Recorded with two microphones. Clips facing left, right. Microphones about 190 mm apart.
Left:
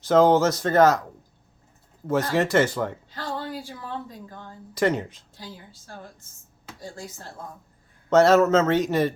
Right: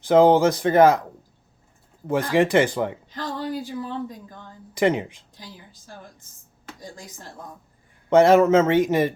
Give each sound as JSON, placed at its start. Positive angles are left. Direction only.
{"t": 0.1, "sound": "speech", "side_deg": -15}
{"t": 2.0, "sound": "a woman's voice", "side_deg": -15}
{"t": 6.8, "sound": "speech", "side_deg": -15}